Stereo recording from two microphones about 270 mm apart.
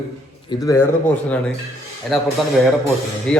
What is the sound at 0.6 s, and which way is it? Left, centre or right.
Speech, centre.